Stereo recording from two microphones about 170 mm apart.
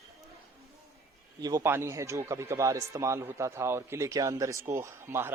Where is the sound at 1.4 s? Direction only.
20° right (ahead or behind).